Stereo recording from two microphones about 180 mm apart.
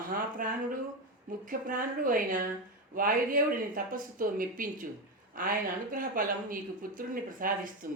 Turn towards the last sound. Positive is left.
turn(degrees=-50)  # may be behind; listen again after turning